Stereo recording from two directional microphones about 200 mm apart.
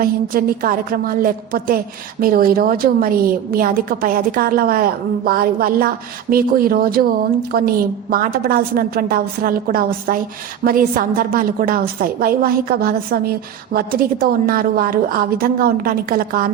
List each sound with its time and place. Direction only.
0.0 s a woman's voice: 45° right (ahead or behind)
8.1 s a woman's voice: 45° right (ahead or behind)